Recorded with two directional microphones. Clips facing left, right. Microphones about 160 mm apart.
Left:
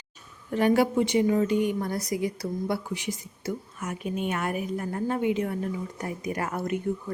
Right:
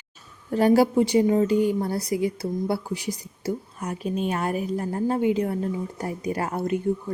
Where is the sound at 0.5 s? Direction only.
35° right (ahead or behind).